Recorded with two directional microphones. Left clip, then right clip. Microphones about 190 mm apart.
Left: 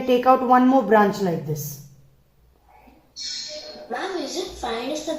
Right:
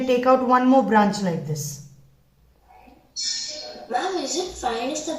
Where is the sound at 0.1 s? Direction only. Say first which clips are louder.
Left 2 dB; 40° left (ahead or behind).